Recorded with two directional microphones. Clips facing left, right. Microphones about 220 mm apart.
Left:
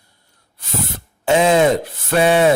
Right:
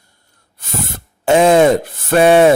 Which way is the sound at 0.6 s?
50° right (ahead or behind).